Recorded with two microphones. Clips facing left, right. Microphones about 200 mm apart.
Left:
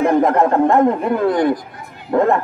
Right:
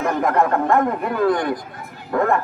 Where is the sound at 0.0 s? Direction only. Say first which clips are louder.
Left 5 dB; 25° left (ahead or behind).